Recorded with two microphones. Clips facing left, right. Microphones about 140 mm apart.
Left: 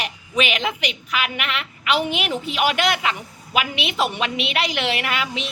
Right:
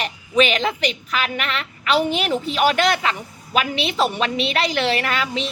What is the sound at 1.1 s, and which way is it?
Speech, 10° left (ahead or behind).